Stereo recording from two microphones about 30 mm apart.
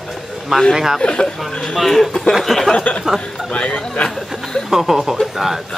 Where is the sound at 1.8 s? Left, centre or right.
Centre.